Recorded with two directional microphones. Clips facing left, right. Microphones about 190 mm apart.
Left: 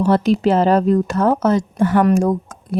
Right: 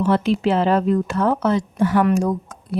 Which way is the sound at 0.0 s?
40° left (ahead or behind).